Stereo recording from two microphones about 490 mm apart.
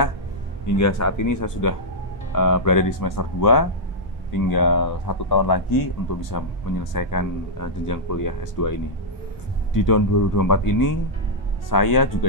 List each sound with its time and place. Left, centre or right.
0.7 s speech: left
9.8 s speech: left